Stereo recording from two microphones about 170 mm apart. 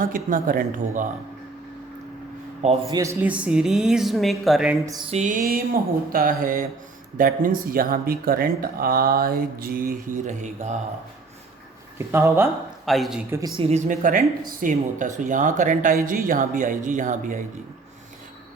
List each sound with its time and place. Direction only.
0.0 s speech: 55° right (ahead or behind)
2.9 s speech: 15° right (ahead or behind)
5.1 s speech: 45° right (ahead or behind)
11.9 s speech: 15° right (ahead or behind)
12.8 s a man's voice: centre (ahead or behind)
13.6 s speech: 40° right (ahead or behind)